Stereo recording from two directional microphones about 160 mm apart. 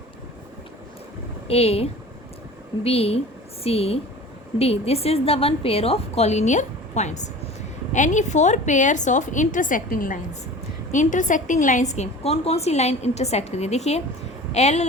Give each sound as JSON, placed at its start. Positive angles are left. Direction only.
{"t": 1.5, "sound": "a woman's voice", "side_deg": 40}